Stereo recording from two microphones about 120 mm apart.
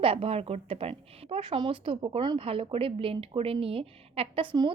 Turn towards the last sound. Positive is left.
turn(degrees=-40)  # may be behind; listen again after turning